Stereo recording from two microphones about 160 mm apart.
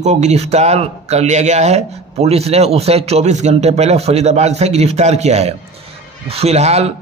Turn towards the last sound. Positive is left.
turn(degrees=-40)  # may be behind; listen again after turning